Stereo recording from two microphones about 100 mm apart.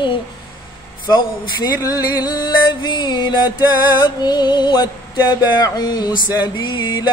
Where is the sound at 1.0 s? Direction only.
40° left (ahead or behind).